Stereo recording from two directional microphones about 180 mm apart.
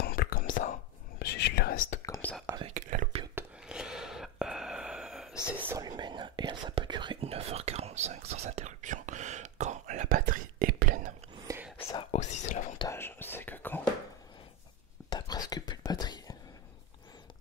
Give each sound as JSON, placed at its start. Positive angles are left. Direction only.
{"t": 0.0, "sound": "whispering", "side_deg": 55}
{"t": 1.2, "sound": "whispering", "side_deg": 65}
{"t": 2.0, "sound": "whispering", "side_deg": 20}
{"t": 2.7, "sound": "whispering", "side_deg": -45}
{"t": 3.3, "sound": "gasp", "side_deg": -5}
{"t": 5.3, "sound": "whispering", "side_deg": 15}
{"t": 5.7, "sound": "whispering", "side_deg": -20}
{"t": 11.4, "sound": "whispering", "side_deg": -10}
{"t": 12.1, "sound": "a sound", "side_deg": 40}
{"t": 12.7, "sound": "whispering", "side_deg": 15}
{"t": 15.0, "sound": "whispering", "side_deg": 20}